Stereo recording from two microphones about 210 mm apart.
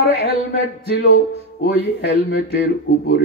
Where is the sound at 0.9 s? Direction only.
50° left (ahead or behind).